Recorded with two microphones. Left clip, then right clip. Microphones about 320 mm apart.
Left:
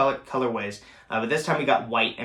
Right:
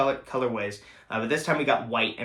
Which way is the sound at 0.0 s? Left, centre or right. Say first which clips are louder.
Left 2 dB; centre.